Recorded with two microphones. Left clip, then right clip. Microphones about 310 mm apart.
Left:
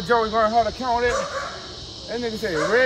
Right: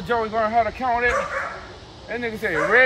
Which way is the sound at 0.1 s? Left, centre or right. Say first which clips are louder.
Left 2 dB; centre.